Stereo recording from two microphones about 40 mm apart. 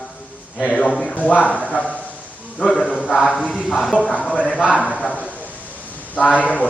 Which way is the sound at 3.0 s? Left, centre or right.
Left.